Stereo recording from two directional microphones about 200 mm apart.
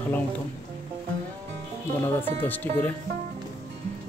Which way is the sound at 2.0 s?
10° left (ahead or behind).